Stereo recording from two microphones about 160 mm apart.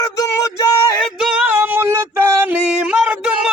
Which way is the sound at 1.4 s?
10° right (ahead or behind).